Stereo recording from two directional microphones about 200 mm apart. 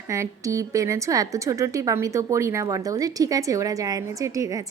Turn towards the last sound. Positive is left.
turn(degrees=-15)  # may be behind; listen again after turning